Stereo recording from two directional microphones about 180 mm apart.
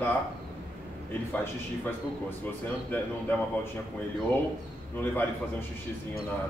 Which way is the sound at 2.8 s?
10° left (ahead or behind).